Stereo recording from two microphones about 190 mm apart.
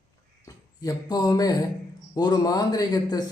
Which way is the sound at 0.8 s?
20° left (ahead or behind).